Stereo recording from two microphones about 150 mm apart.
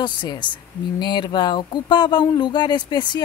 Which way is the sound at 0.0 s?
30° left (ahead or behind).